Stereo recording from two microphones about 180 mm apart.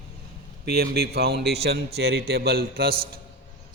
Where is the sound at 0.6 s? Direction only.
60° right (ahead or behind).